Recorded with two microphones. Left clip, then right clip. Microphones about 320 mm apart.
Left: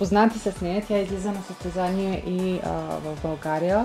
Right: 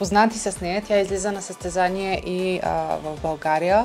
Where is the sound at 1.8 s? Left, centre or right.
Right.